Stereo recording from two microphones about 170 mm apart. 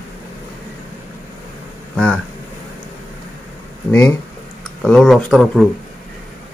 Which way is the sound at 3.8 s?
10° left (ahead or behind).